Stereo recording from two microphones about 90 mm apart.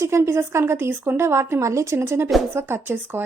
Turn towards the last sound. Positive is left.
turn(degrees=-20)  # may be behind; listen again after turning